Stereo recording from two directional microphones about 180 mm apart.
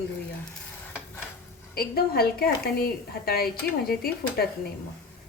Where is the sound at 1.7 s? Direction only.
55° left (ahead or behind).